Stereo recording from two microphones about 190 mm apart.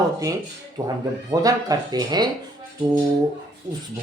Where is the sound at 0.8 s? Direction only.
20° right (ahead or behind).